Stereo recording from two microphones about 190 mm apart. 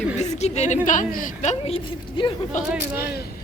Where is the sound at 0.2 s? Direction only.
35° left (ahead or behind).